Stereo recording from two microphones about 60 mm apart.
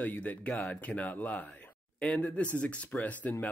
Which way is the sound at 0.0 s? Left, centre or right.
Left.